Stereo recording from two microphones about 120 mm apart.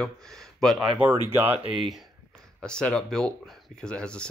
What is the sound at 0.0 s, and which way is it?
Speech, 5° left (ahead or behind).